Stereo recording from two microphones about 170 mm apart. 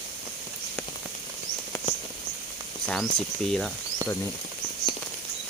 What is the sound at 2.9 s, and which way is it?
Speech, 5° left (ahead or behind).